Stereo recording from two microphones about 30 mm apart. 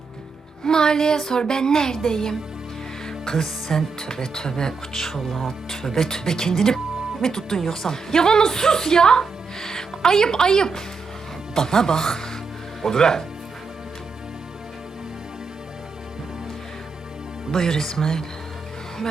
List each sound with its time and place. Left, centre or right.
0.6 s speech: left
17.5 s speech: centre